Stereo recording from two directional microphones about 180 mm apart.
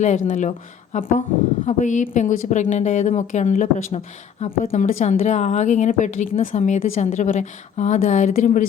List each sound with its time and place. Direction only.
0.3 s a woman's voice: 45° left (ahead or behind)